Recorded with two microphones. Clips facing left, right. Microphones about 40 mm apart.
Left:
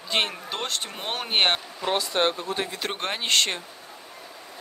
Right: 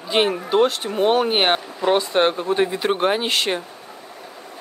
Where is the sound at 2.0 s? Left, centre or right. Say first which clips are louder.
Right 6 dB; right.